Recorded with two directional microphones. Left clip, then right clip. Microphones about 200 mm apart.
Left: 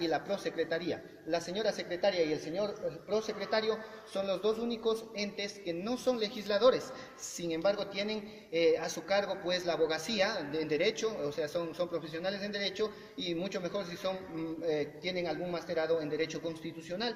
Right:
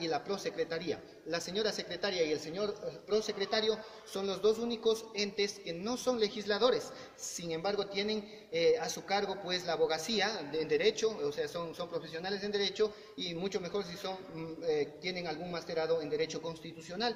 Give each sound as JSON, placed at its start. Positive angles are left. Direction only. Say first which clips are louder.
{"t": 0.0, "sound": "a man's voice", "louder": "left 2 dB", "side_deg": -40}